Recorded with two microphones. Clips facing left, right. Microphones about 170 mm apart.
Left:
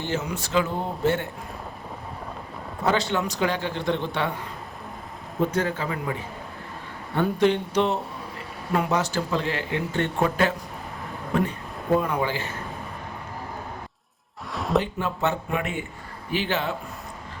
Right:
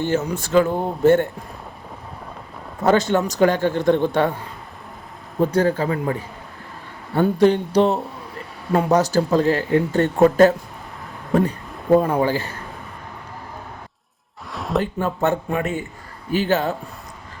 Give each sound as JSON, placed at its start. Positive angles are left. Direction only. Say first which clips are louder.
{"t": 0.0, "sound": "a man's voice", "louder": "right 7 dB", "side_deg": -50}
{"t": 2.8, "sound": "a man's voice", "louder": "right 7 dB", "side_deg": -45}
{"t": 5.5, "sound": "speech", "louder": "right 7 dB", "side_deg": -35}
{"t": 7.2, "sound": "speech", "louder": "right 5 dB", "side_deg": -40}
{"t": 11.9, "sound": "speech", "louder": "right 7 dB", "side_deg": -40}
{"t": 14.5, "sound": "a sound", "louder": "right 1 dB", "side_deg": 0}
{"t": 14.9, "sound": "a man's voice", "louder": "right 5 dB", "side_deg": -50}